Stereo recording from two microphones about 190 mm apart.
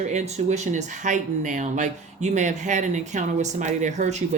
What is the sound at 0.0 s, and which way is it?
Speech, 35° right (ahead or behind).